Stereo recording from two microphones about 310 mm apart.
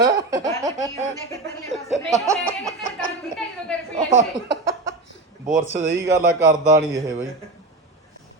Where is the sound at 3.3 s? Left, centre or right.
Centre.